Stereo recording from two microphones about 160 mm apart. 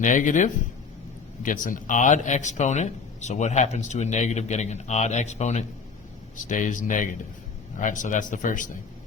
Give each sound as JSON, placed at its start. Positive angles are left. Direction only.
{"t": 0.0, "sound": "speech", "side_deg": 50}